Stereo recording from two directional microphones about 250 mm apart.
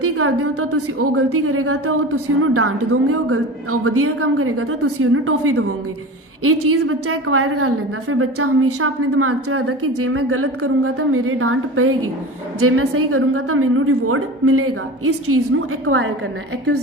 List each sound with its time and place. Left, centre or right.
0.0 s a woman's voice: right